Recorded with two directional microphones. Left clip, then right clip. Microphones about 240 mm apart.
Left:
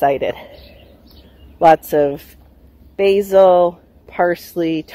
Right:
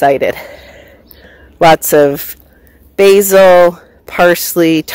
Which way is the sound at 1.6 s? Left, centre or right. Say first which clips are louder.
Right 5 dB; right.